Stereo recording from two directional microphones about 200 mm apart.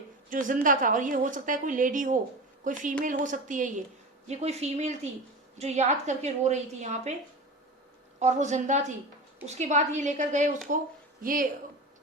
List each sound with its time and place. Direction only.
0.3 s a woman's voice: 40° right (ahead or behind)
8.2 s a woman's voice: 35° right (ahead or behind)